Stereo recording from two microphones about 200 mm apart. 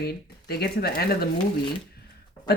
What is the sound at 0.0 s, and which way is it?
Speech, 50° left (ahead or behind).